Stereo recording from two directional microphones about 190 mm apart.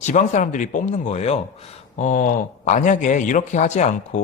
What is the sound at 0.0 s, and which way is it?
Speech, 40° left (ahead or behind).